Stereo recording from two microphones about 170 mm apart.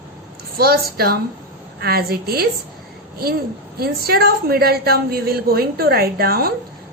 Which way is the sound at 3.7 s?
65° right (ahead or behind).